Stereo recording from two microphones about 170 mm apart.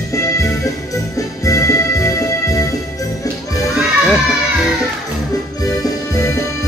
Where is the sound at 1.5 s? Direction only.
20° left (ahead or behind).